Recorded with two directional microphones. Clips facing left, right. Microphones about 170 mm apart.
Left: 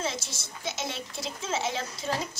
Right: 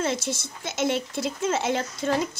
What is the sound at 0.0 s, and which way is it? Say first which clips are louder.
Speech: right 7 dB; 55° right (ahead or behind).